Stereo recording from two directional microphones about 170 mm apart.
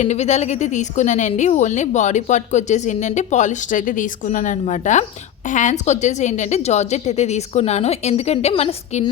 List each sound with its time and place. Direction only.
0.0 s a woman's voice: 40° left (ahead or behind)